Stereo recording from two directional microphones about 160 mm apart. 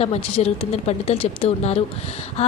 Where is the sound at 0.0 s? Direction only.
40° left (ahead or behind).